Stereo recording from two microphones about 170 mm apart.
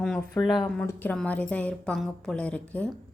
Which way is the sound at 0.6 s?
5° left (ahead or behind).